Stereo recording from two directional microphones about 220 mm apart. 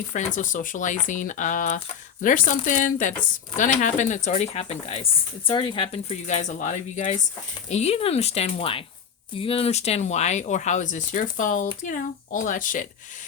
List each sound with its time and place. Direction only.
0.3 s speech: 35° left (ahead or behind)